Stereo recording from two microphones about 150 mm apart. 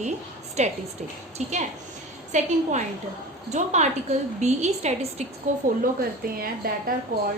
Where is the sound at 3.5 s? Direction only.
50° right (ahead or behind).